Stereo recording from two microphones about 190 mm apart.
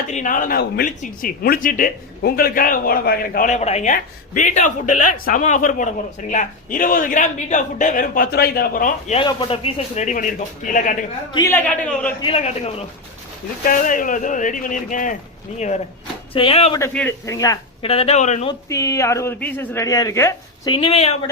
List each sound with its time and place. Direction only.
0.1 s a man's voice: 40° left (ahead or behind)
9.1 s a man's voice: 25° left (ahead or behind); by 10.9 s 45° left (ahead or behind)
11.3 s speech: 15° left (ahead or behind)
12.2 s a man's voice: 30° left (ahead or behind)
13.7 s a man's voice: 45° left (ahead or behind)
16.9 s speech: 5° left (ahead or behind)
17.2 s speech: 20° left (ahead or behind)
17.8 s a man's voice: 30° left (ahead or behind)
18.7 s speech: 15° left (ahead or behind)
20.7 s a man's voice: 30° left (ahead or behind)